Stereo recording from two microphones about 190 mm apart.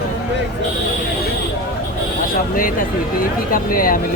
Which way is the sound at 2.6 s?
45° left (ahead or behind).